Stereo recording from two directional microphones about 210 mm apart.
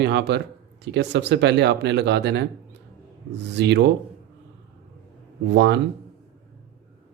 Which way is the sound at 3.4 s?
55° right (ahead or behind).